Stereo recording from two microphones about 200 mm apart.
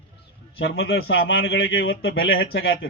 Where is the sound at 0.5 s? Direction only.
70° left (ahead or behind).